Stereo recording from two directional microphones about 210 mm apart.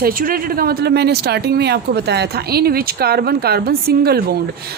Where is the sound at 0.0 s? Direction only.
45° right (ahead or behind).